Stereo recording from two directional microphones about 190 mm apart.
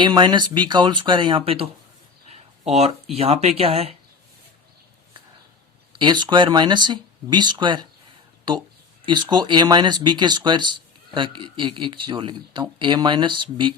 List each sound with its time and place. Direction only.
0.0 s speech: 25° right (ahead or behind)
5.9 s speech: 25° right (ahead or behind)
9.0 s speech: 25° right (ahead or behind)